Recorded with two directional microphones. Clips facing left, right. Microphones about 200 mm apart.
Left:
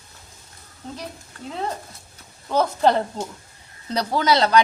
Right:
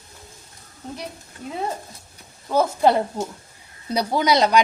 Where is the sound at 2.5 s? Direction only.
10° right (ahead or behind).